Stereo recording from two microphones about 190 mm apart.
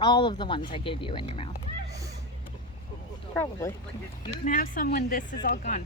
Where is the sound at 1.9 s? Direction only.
15° right (ahead or behind).